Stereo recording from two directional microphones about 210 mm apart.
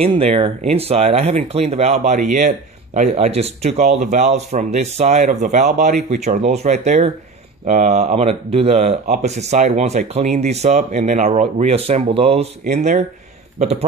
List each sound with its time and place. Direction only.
0.0 s a man's voice: 30° right (ahead or behind)